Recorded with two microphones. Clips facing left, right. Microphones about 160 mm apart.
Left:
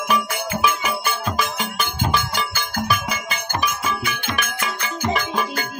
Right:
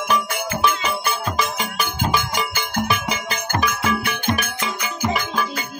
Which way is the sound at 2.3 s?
20° right (ahead or behind).